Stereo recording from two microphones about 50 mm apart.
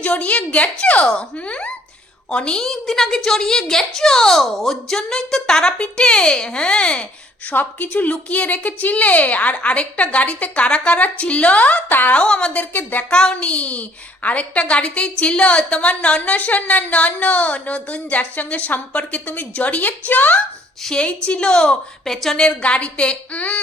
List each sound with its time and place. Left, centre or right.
0.0 s a woman's voice: left
2.6 s a woman's voice: centre; by 7.1 s left
7.5 s a woman's voice: left
12.1 s a woman's voice: centre
12.5 s a woman's voice: left
13.1 s a woman's voice: centre
19.8 s a woman's voice: left
20.9 s a woman's voice: left
22.0 s a woman's voice: centre
22.4 s a woman's voice: left